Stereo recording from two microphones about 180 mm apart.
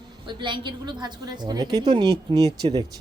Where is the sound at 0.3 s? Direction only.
25° right (ahead or behind).